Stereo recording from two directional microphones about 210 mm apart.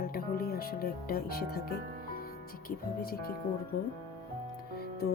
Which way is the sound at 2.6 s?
45° left (ahead or behind).